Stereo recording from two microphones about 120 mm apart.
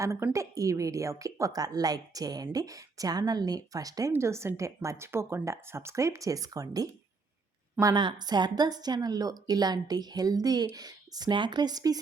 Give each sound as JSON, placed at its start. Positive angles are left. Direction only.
{"t": 0.0, "sound": "a woman's voice", "side_deg": -25}